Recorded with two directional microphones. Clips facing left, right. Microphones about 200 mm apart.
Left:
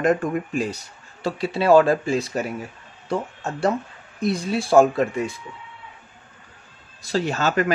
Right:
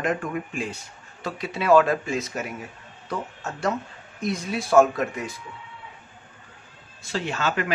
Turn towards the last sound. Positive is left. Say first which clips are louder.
# left 5 dB
turn(degrees=40)  # may be behind; listen again after turning